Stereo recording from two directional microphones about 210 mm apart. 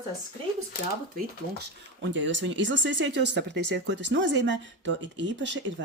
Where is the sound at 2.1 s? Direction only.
60° right (ahead or behind).